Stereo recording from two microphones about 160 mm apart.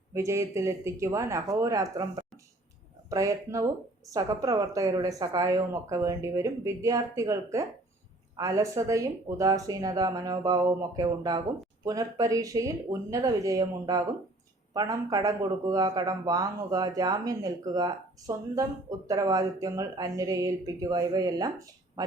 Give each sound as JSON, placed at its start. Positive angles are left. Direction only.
{"t": 0.1, "sound": "a man's voice", "side_deg": -20}